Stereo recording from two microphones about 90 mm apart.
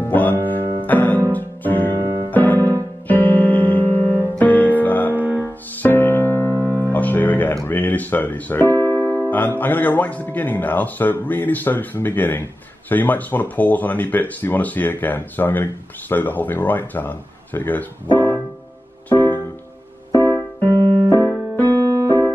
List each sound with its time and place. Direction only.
0.0 s music: 20° left (ahead or behind)
5.1 s music: 20° right (ahead or behind)
5.8 s music: 20° left (ahead or behind)
8.6 s music: 45° right (ahead or behind)
9.3 s speech: 20° left (ahead or behind)
18.1 s piano: 20° left (ahead or behind)
19.0 s music: 20° left (ahead or behind)
20.2 s keyboard: 40° right (ahead or behind)
21.9 s music: 40° right (ahead or behind)